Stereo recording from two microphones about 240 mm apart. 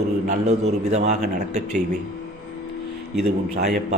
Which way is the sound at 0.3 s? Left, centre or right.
Right.